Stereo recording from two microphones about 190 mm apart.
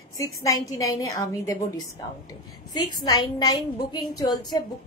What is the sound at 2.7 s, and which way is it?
A woman's voice, 20° left (ahead or behind).